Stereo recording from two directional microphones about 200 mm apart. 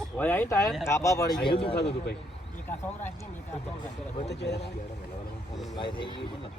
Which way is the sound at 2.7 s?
10° left (ahead or behind).